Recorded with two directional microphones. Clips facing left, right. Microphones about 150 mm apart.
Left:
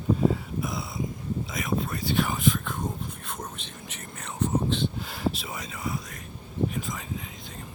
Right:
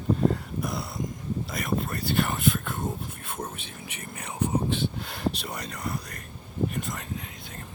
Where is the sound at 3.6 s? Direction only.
60° right (ahead or behind).